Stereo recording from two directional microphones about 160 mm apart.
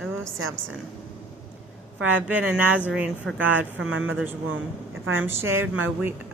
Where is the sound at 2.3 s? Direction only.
10° right (ahead or behind).